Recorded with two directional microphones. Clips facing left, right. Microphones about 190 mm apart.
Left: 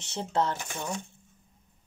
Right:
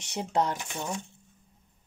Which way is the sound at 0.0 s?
15° right (ahead or behind).